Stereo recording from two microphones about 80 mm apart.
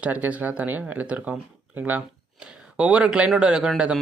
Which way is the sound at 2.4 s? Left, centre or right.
Centre.